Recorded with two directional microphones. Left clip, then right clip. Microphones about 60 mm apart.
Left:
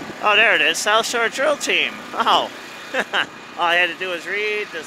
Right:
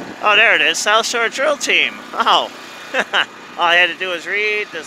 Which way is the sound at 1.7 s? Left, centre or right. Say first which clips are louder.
Right 4 dB; left.